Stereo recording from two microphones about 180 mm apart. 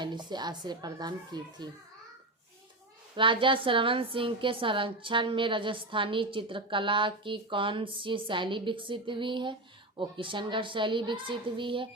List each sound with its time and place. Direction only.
0.0 s a woman's voice: 25° right (ahead or behind)
3.2 s a woman's voice: 30° right (ahead or behind)